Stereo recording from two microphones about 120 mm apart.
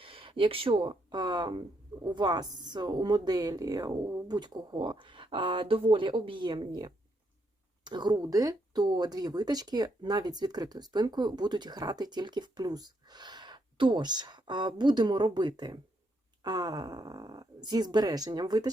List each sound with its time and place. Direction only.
0.0 s speech: 45° right (ahead or behind)